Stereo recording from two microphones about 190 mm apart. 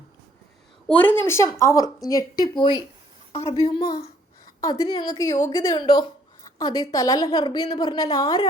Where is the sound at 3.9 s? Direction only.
55° left (ahead or behind).